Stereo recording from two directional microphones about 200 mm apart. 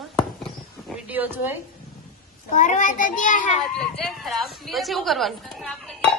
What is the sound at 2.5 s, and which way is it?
A child's voice, 40° left (ahead or behind).